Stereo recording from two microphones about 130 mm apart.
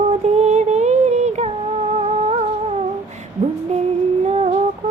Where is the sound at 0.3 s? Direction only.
60° right (ahead or behind).